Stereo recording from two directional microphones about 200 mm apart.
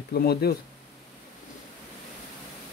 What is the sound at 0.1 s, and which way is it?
Speech, 50° left (ahead or behind).